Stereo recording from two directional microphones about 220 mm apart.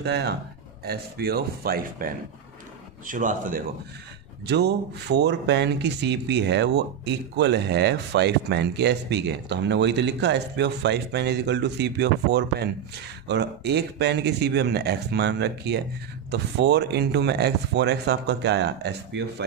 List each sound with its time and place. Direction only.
0.0 s a man's voice: 50° right (ahead or behind)
4.5 s speech: 50° right (ahead or behind)